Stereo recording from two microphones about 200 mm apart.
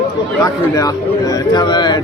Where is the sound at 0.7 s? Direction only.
15° left (ahead or behind).